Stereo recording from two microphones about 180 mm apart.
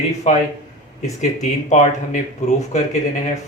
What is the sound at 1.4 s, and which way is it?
Speech, 40° left (ahead or behind).